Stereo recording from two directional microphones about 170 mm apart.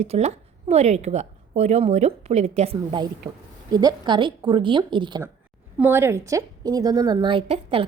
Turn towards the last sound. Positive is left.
turn(degrees=-30)  # may be behind; listen again after turning